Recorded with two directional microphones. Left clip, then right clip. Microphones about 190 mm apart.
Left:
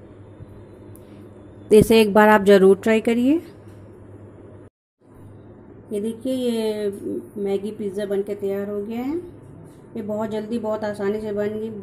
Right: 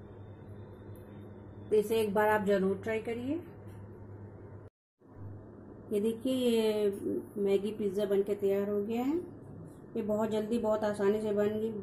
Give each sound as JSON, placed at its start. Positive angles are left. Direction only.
{"t": 1.7, "sound": "a woman's voice", "side_deg": 45}
{"t": 5.9, "sound": "a woman's voice", "side_deg": 5}